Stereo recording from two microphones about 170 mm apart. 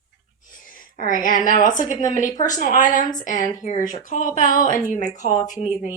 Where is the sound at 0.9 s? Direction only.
55° left (ahead or behind).